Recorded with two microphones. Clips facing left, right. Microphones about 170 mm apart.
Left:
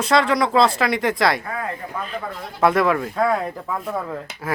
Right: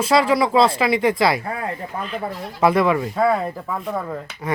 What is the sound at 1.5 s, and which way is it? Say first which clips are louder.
Speech: right 1 dB; 30° right (ahead or behind).